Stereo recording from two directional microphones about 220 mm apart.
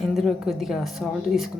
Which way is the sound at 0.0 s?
Centre (ahead or behind).